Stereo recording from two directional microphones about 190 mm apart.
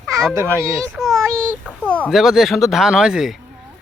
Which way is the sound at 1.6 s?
5° left (ahead or behind).